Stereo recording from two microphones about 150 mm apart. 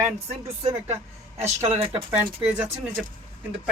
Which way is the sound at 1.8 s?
40° right (ahead or behind).